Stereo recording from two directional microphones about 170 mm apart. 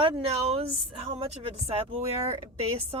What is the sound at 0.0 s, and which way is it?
A woman's voice, 35° right (ahead or behind).